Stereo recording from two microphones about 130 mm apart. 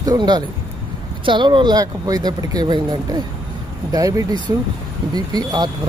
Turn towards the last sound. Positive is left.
turn(degrees=-30)  # may be behind; listen again after turning